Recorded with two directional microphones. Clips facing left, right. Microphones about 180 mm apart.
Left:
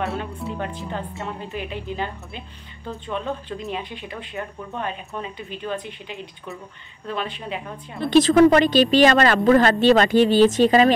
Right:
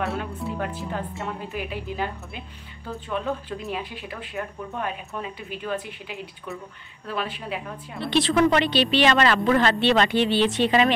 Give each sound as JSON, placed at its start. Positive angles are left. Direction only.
{"t": 0.0, "sound": "speech", "side_deg": 0}
{"t": 8.0, "sound": "a woman's voice", "side_deg": 45}